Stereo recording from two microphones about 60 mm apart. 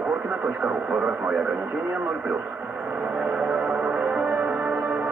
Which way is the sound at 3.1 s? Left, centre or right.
Right.